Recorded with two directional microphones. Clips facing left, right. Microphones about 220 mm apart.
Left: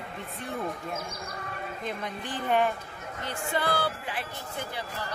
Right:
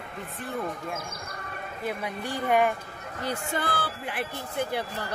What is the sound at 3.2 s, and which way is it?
Speech, 45° right (ahead or behind).